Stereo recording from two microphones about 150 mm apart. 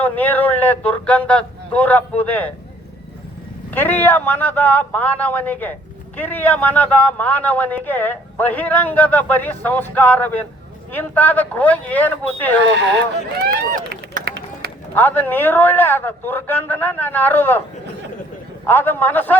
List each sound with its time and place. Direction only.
0.0 s a man's voice: 10° left (ahead or behind)
3.7 s a man's voice: 10° left (ahead or behind)
13.5 s run: 80° right
14.9 s a man's voice: 15° left (ahead or behind)
18.7 s a man's voice: 15° left (ahead or behind)